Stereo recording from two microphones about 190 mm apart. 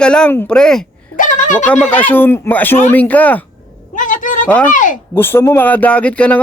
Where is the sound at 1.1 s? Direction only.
40° left (ahead or behind).